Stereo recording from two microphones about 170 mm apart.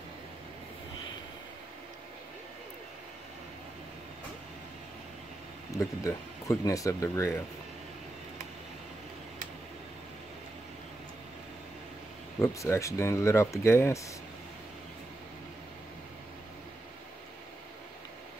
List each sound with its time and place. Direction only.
5.8 s speech: 15° left (ahead or behind)
12.4 s speech: 15° left (ahead or behind)